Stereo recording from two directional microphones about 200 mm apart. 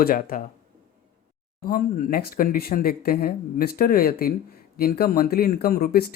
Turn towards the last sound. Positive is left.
turn(degrees=45)  # may be behind; listen again after turning